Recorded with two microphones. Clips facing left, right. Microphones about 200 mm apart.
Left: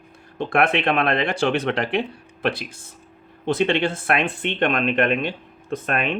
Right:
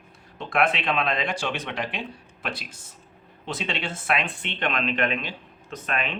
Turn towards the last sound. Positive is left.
turn(degrees=50)  # may be behind; listen again after turning